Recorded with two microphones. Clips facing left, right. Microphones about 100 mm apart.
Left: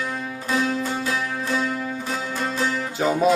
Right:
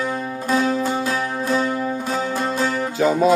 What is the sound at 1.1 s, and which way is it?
Music, 35° right (ahead or behind).